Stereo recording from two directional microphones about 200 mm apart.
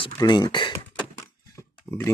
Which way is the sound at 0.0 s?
20° left (ahead or behind).